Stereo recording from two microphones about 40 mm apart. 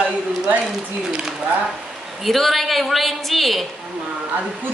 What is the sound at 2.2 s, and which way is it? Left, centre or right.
A woman's voice, centre.